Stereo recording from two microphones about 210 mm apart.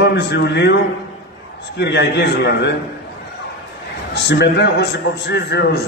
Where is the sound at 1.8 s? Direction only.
55° left (ahead or behind).